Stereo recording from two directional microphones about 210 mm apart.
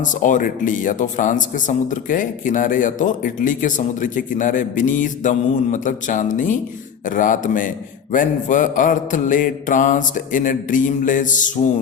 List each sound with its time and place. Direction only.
0.0 s speech: 40° left (ahead or behind)